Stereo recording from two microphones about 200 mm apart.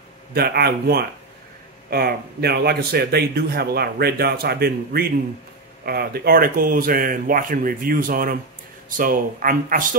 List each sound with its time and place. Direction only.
0.3 s speech: 50° right (ahead or behind)